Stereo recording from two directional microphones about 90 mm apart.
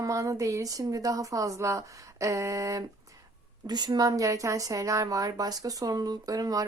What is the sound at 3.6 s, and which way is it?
Speech, 50° right (ahead or behind).